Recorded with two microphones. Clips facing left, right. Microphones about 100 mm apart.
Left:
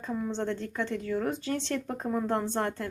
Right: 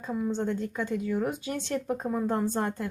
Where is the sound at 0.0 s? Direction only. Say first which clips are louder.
Right 2 dB; 10° right (ahead or behind).